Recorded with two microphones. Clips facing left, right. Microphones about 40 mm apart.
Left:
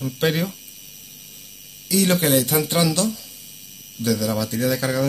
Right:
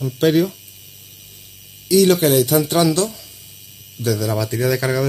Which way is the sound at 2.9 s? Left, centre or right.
Right.